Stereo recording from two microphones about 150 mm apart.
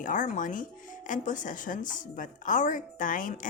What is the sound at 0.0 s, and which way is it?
Speech, 60° left (ahead or behind).